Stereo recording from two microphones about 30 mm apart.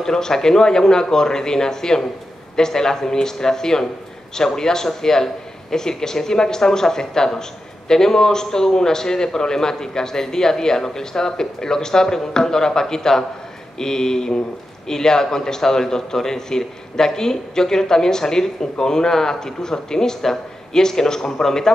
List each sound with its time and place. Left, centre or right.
0.0 s a man's voice: centre